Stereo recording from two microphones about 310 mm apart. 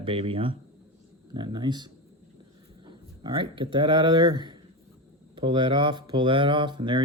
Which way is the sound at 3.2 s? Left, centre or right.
Centre.